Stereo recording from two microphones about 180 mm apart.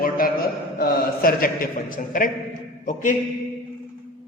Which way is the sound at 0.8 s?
55° left (ahead or behind).